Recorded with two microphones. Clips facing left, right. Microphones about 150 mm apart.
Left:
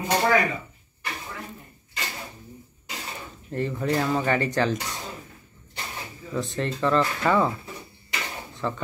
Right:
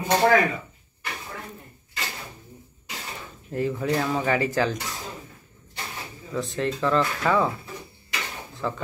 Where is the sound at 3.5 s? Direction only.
5° right (ahead or behind).